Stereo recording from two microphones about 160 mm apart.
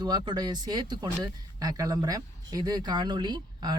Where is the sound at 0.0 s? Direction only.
25° right (ahead or behind).